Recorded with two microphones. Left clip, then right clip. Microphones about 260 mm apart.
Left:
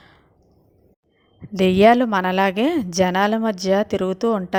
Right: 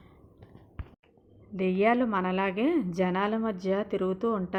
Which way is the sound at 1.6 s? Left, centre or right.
Left.